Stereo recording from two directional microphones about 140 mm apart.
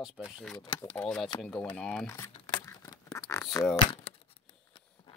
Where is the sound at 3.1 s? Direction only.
20° left (ahead or behind).